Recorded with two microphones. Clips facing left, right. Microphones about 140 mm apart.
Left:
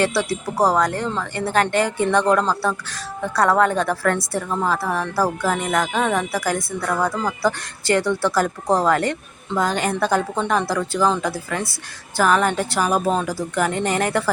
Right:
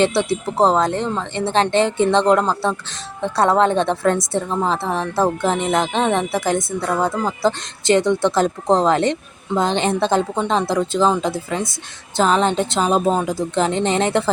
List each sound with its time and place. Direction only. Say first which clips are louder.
0.0 s speech: right 3 dB; 25° right (ahead or behind)